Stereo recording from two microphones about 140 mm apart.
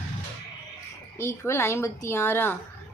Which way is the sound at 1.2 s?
20° left (ahead or behind).